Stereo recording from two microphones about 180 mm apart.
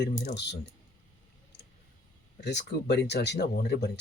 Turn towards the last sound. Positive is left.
turn(degrees=65)  # may be behind; listen again after turning